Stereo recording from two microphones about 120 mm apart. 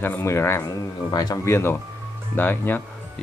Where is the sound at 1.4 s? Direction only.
20° left (ahead or behind).